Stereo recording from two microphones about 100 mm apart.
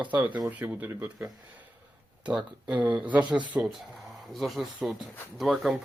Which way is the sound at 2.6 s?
15° right (ahead or behind).